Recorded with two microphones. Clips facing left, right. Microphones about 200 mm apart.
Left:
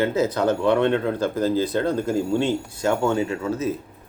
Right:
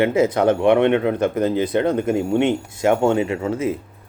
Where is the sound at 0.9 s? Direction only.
70° right (ahead or behind).